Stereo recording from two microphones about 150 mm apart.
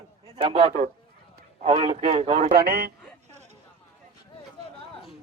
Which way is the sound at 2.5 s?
85° right.